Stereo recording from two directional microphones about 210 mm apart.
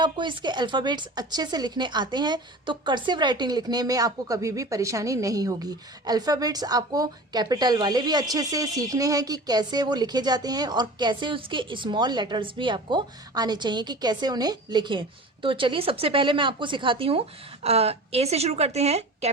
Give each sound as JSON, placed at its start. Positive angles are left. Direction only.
{"t": 0.0, "sound": "speech", "side_deg": -20}